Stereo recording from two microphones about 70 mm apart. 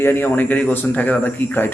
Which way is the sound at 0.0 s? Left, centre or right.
Left.